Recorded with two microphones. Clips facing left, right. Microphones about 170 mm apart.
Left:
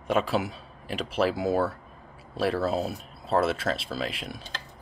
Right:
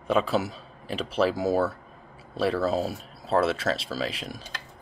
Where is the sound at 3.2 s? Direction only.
Centre (ahead or behind).